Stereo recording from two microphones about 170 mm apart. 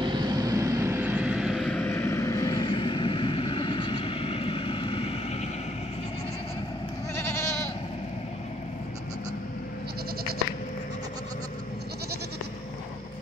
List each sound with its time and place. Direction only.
0.0 s vehicle: 25° right (ahead or behind); by 5.5 s 35° left (ahead or behind)
7.2 s goat: 15° left (ahead or behind)